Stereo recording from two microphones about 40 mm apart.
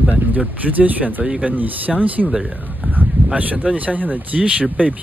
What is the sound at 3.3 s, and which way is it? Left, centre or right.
Speech, right.